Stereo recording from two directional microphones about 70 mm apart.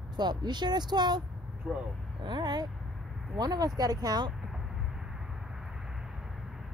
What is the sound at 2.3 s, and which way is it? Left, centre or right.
Speech, right.